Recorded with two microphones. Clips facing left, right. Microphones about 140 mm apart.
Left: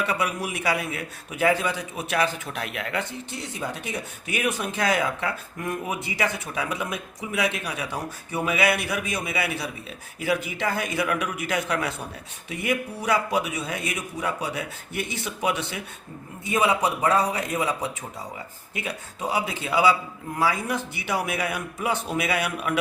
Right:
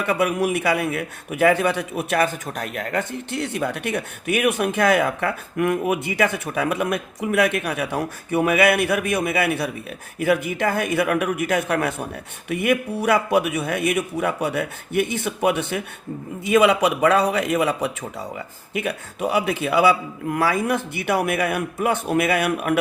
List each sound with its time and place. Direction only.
0.0 s a man's voice: 55° right (ahead or behind)
16.4 s a man's voice: 85° right
20.5 s a man's voice: 60° right (ahead or behind)